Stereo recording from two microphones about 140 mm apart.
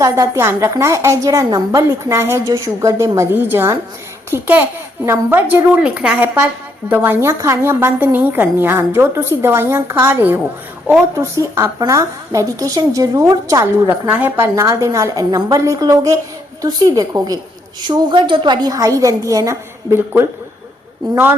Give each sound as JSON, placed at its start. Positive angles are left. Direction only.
{"t": 0.0, "sound": "a woman's voice", "side_deg": -20}